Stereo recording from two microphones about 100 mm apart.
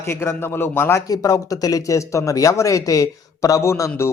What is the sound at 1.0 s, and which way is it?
Speech, 40° left (ahead or behind).